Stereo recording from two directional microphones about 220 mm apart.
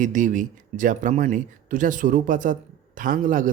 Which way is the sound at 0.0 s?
35° right (ahead or behind).